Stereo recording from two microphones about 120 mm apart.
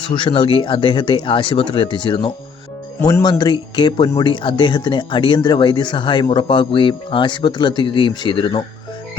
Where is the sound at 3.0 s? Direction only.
30° left (ahead or behind).